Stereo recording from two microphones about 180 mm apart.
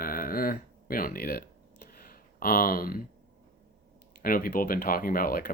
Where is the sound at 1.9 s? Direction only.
55° left (ahead or behind).